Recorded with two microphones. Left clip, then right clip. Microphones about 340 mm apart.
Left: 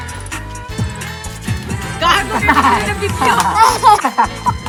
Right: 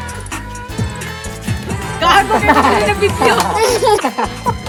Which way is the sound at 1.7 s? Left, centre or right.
Centre.